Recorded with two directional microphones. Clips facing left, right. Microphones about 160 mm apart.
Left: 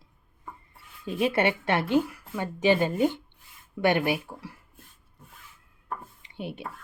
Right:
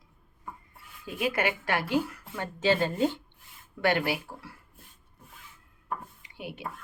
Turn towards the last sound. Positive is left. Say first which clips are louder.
# left 4 dB
turn(degrees=25)  # may be behind; listen again after turning